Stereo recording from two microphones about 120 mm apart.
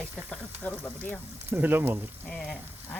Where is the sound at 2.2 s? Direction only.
5° left (ahead or behind).